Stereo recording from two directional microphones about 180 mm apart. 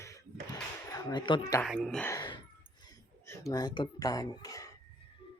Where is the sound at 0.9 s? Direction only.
20° left (ahead or behind).